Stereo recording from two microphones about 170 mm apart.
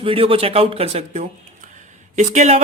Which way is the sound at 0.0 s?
30° right (ahead or behind).